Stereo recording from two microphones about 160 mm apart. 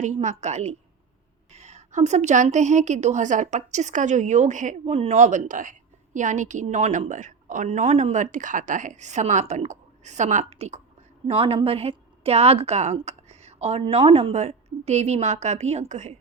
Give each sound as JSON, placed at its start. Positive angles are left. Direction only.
{"t": 0.0, "sound": "a woman's voice", "side_deg": -50}